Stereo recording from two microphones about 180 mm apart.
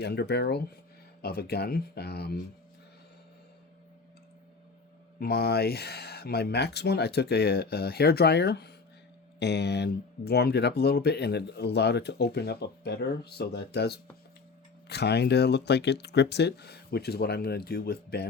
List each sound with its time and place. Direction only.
0.0 s speech: 65° left (ahead or behind)
5.2 s speech: 60° left (ahead or behind)